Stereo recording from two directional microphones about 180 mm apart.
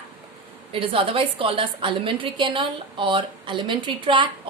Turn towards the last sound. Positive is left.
turn(degrees=-25)  # may be behind; listen again after turning